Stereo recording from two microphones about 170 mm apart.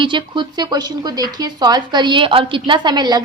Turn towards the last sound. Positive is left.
turn(degrees=-25)  # may be behind; listen again after turning